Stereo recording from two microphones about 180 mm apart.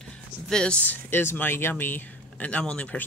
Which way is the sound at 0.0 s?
5° left (ahead or behind).